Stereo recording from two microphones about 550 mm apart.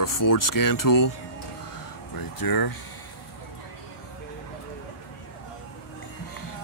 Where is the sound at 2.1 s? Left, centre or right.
Left.